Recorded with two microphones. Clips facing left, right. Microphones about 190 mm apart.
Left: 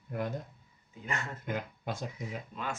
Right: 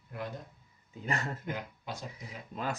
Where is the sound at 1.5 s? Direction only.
50° left (ahead or behind).